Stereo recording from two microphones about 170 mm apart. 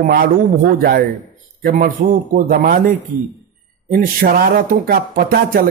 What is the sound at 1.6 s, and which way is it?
Speech, 60° right (ahead or behind).